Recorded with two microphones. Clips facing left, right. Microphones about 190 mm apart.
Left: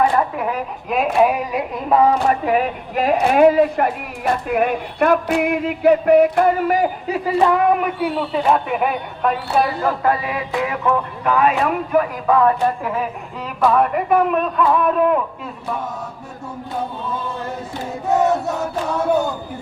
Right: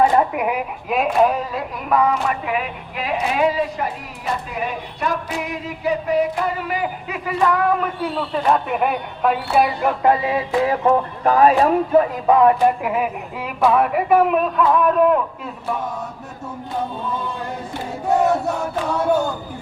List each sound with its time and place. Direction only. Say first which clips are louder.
0.0 s a sound: right 1 dB; 20° right (ahead or behind)
1.2 s speech: left 2 dB; 10° left (ahead or behind)
1.9 s speech: left 3 dB; 30° left (ahead or behind)
7.3 s female singing: left 3 dB; 25° left (ahead or behind)
8.0 s a woman's voice: left 2 dB; 5° left (ahead or behind)
10.0 s a woman's voice: right 2 dB; 25° right (ahead or behind); by 15.2 s centre (ahead or behind)